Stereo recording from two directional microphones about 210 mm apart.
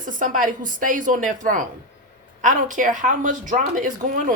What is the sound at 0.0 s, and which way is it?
Speech, 40° right (ahead or behind).